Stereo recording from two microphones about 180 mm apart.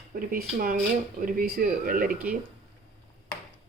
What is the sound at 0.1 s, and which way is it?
Speech, 55° right (ahead or behind).